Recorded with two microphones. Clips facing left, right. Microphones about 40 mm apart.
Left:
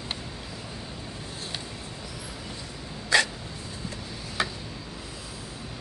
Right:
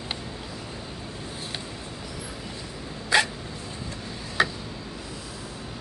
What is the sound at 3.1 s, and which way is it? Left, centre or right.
Dog, centre.